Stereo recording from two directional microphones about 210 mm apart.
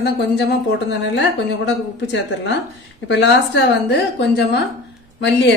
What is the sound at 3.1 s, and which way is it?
Speech, 55° left (ahead or behind).